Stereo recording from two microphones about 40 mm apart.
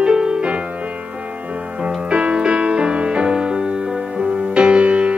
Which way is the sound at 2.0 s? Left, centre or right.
Right.